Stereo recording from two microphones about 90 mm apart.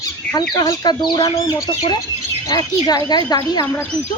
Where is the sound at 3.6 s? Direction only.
25° left (ahead or behind).